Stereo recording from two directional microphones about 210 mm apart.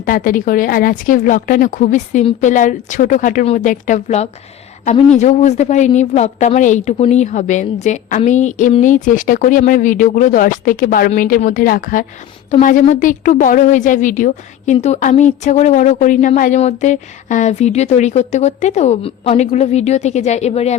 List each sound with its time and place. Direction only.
0.0 s a woman's voice: 40° left (ahead or behind)